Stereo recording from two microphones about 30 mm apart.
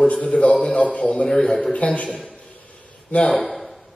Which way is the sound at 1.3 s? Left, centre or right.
Centre.